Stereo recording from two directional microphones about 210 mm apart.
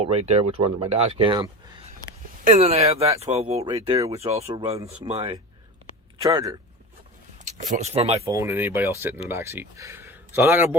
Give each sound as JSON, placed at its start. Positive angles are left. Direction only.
{"t": 0.0, "sound": "speech", "side_deg": -30}
{"t": 6.2, "sound": "speech", "side_deg": -15}
{"t": 7.4, "sound": "speech", "side_deg": -35}
{"t": 8.2, "sound": "speech", "side_deg": -15}